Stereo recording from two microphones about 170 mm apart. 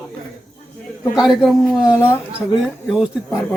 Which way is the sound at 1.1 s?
5° right (ahead or behind).